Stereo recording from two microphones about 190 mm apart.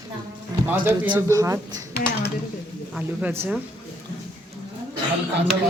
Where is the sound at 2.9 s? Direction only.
10° right (ahead or behind).